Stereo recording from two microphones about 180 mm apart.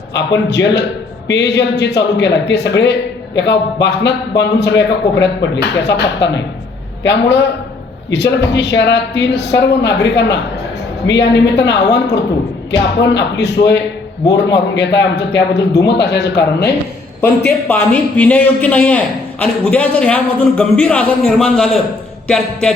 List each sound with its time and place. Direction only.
0.1 s a man's voice: 75° left (ahead or behind)
17.2 s a man's voice: 10° left (ahead or behind)